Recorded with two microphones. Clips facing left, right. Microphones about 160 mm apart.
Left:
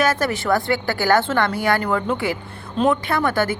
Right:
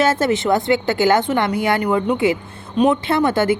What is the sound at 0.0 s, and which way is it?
Speech, 25° right (ahead or behind).